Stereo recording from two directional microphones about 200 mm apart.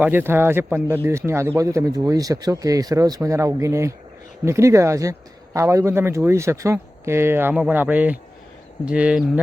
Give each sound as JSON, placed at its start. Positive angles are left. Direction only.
{"t": 0.0, "sound": "speech", "side_deg": -10}